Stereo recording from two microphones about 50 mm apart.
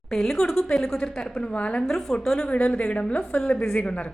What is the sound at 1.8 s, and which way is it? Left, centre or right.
Speech, centre.